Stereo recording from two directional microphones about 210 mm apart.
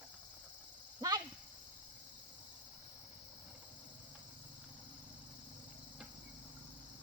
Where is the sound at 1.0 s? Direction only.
20° right (ahead or behind).